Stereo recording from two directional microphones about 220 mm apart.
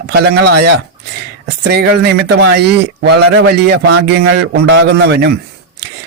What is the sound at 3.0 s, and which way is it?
A man's voice, 50° right (ahead or behind).